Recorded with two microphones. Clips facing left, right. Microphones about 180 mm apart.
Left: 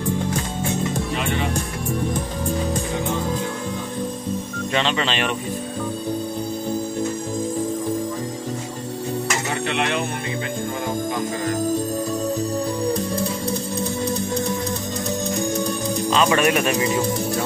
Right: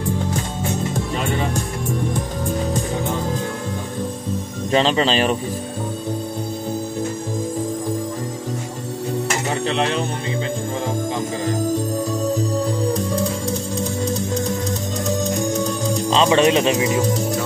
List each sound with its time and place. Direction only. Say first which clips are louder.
4.7 s speech: right 6 dB; 35° right (ahead or behind)
9.7 s music: right 2 dB; 35° right (ahead or behind)
16.1 s speech: right 3 dB; 25° right (ahead or behind)